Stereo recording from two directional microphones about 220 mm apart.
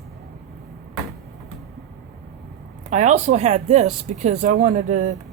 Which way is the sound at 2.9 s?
30° right (ahead or behind).